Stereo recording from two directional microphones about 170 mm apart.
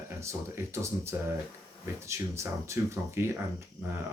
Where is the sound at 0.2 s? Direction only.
15° right (ahead or behind).